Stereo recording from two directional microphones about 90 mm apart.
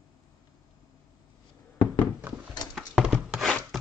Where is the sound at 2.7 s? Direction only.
10° right (ahead or behind).